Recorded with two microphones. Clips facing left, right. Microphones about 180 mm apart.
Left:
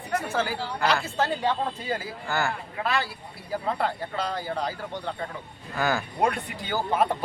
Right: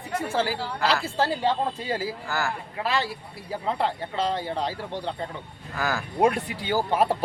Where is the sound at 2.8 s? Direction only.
30° right (ahead or behind).